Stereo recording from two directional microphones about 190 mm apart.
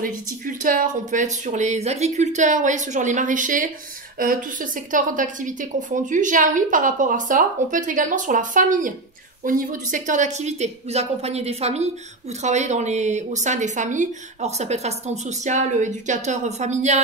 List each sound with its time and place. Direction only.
0.0 s a woman's voice: 45° right (ahead or behind)